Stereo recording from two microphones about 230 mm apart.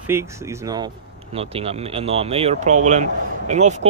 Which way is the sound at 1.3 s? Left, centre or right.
Right.